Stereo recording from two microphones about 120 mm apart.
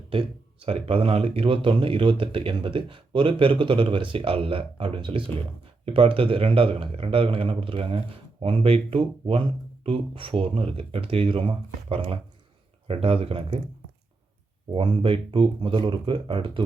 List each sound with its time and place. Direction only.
0.1 s speech: 50° right (ahead or behind)
14.7 s speech: 45° right (ahead or behind)